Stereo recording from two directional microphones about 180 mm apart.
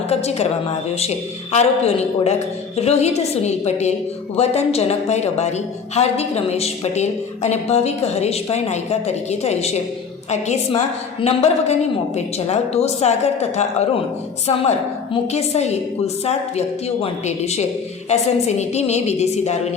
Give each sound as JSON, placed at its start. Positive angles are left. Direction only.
{"t": 0.1, "sound": "music", "side_deg": 35}
{"t": 1.5, "sound": "a woman's voice", "side_deg": 35}